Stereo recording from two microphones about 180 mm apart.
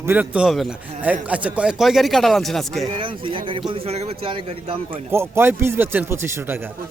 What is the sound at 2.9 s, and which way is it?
A man's voice, 30° right (ahead or behind).